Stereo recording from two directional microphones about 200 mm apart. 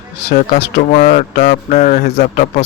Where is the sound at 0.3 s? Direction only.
40° left (ahead or behind).